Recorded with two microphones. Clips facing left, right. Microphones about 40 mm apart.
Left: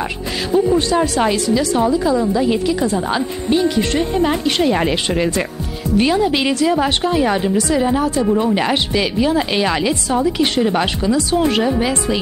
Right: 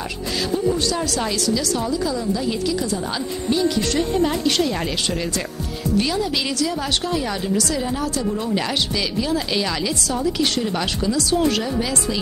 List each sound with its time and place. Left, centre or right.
0.5 s a woman's voice: left